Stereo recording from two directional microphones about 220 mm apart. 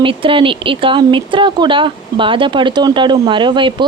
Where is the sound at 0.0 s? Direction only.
25° right (ahead or behind).